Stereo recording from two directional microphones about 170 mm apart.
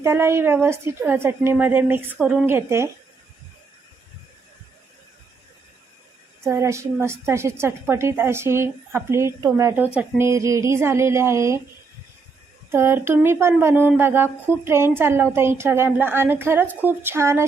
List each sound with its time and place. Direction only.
0.0 s a woman's voice: 15° right (ahead or behind)
6.4 s a woman's voice: 15° right (ahead or behind)
12.7 s a woman's voice: 15° right (ahead or behind)